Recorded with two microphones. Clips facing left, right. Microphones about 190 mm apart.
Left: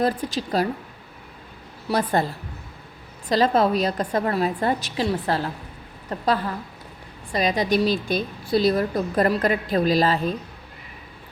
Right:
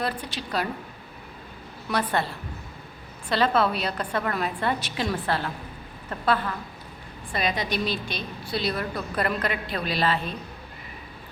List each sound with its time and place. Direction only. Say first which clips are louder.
0.0 s a woman's voice: left 7 dB; 40° left (ahead or behind)
1.9 s a woman's voice: left 4 dB; 40° left (ahead or behind)